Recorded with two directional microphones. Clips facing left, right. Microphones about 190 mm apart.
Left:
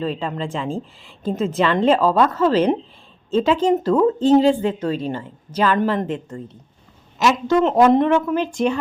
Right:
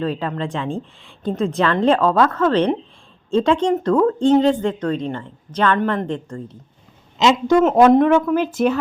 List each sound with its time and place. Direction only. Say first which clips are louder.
0.0 s a woman's voice: right 1 dB; centre (ahead or behind)
7.2 s speech: right 2 dB; 15° right (ahead or behind)
7.6 s a woman's voice: right 2 dB; 5° right (ahead or behind)